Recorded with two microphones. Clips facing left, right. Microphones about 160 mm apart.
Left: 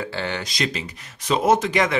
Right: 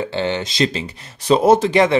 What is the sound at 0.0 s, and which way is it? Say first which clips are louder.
Speech: right 6 dB; 25° right (ahead or behind).